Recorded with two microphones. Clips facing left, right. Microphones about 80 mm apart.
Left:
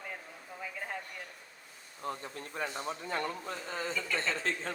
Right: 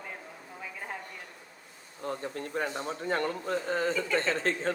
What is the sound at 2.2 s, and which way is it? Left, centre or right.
A man's voice, right.